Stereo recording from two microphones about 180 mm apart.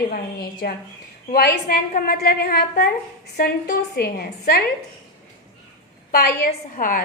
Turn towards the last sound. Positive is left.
turn(degrees=50)  # may be behind; listen again after turning